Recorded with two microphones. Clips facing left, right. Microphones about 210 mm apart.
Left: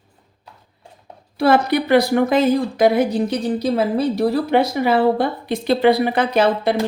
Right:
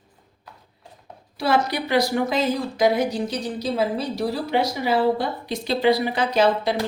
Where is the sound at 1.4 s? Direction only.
55° left (ahead or behind).